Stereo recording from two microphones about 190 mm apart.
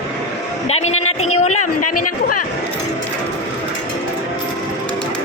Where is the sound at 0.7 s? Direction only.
35° left (ahead or behind).